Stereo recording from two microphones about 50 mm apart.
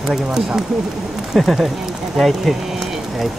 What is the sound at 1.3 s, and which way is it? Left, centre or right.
Speech, centre.